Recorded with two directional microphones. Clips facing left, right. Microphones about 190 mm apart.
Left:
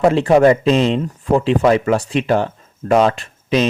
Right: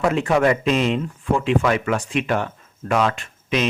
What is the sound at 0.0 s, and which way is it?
Speech, 35° left (ahead or behind).